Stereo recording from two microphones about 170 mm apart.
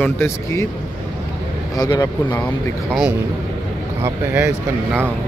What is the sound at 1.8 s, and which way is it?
Speech, 25° left (ahead or behind).